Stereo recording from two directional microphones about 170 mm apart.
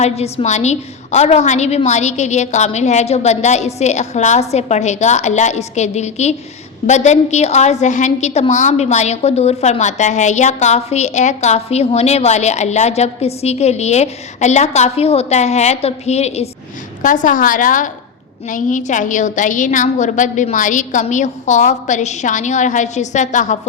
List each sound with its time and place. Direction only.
0.0 s a woman's voice: 40° left (ahead or behind)
17.0 s a woman's voice: 50° left (ahead or behind)